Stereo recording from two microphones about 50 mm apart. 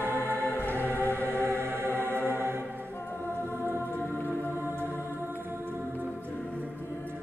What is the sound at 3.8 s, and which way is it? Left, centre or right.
Music, left.